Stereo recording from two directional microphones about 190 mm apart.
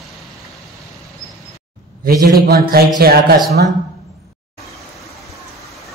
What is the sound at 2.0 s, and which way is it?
A man's voice, 50° right (ahead or behind).